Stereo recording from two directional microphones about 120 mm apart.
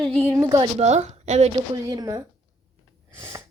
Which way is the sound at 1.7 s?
30° right (ahead or behind).